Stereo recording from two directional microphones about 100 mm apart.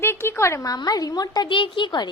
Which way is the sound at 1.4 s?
55° left (ahead or behind).